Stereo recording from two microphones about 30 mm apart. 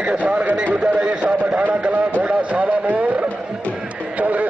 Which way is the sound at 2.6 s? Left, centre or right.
Right.